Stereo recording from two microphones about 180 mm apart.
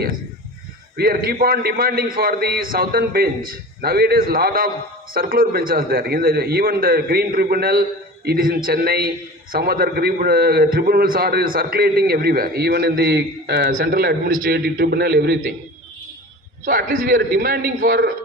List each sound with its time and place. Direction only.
0.9 s a man's voice: 55° right (ahead or behind)
16.6 s a man's voice: 50° right (ahead or behind)